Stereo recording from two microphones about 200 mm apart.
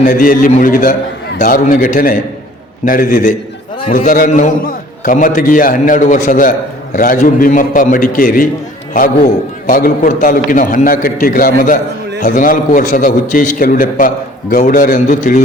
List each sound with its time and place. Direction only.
0.0 s a man's voice: 45° left (ahead or behind)
9.6 s a man's voice: 45° left (ahead or behind)